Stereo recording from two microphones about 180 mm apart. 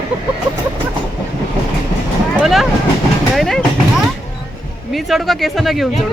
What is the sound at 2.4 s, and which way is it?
Speech, centre (ahead or behind).